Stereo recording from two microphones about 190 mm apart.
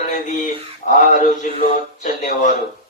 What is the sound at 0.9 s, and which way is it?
Speech, 40° left (ahead or behind).